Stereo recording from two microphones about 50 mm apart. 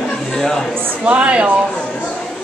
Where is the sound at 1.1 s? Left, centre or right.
Right.